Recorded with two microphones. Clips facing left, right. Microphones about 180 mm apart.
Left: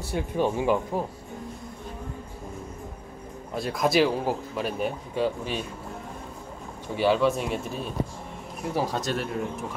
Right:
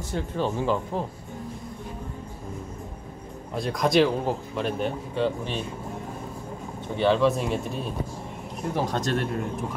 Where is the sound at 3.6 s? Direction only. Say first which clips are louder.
Right 1 dB; 5° left (ahead or behind).